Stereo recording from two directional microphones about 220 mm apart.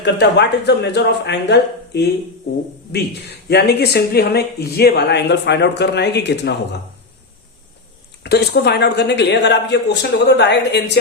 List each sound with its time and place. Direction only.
0.0 s speech: 50° left (ahead or behind)
8.2 s speech: 50° left (ahead or behind)